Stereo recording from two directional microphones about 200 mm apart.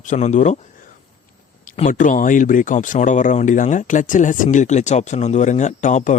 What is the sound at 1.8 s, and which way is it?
Speech, 40° left (ahead or behind).